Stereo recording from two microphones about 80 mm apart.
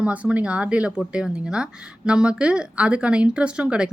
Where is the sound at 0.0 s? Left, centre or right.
Centre.